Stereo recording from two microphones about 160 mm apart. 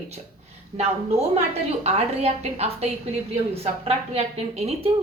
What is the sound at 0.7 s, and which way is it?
A woman's voice, 40° right (ahead or behind).